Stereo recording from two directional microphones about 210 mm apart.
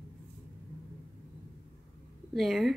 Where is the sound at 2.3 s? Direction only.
Centre (ahead or behind).